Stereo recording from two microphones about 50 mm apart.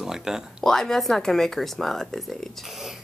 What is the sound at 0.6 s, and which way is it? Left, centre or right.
Speech, centre.